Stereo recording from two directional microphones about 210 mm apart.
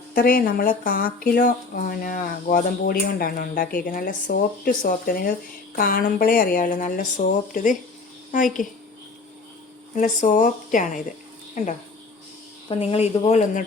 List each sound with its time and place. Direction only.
0.1 s speech: 45° left (ahead or behind)
9.9 s speech: 40° left (ahead or behind)
12.6 s speech: 30° left (ahead or behind)